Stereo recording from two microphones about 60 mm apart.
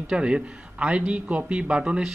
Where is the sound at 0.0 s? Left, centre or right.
Centre.